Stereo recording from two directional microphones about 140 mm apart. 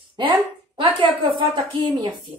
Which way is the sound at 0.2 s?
35° right (ahead or behind).